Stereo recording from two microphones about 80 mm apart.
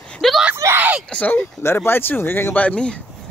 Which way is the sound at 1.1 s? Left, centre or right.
Centre.